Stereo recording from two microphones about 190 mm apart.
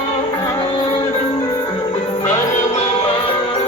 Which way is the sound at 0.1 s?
30° left (ahead or behind).